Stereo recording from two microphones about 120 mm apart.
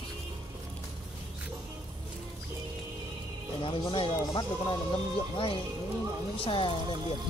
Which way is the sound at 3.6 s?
45° left (ahead or behind).